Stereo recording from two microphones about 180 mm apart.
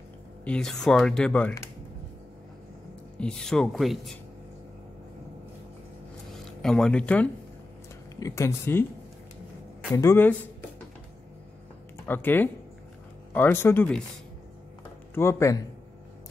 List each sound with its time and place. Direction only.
0.5 s speech: 5° left (ahead or behind)
3.2 s speech: 5° left (ahead or behind)
6.3 s speech: 5° left (ahead or behind)
9.9 s speech: 15° left (ahead or behind)
12.1 s speech: 10° left (ahead or behind)
15.1 s speech: 15° left (ahead or behind)